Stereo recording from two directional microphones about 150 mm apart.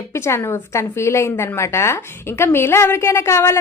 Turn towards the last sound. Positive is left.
turn(degrees=20)  # may be behind; listen again after turning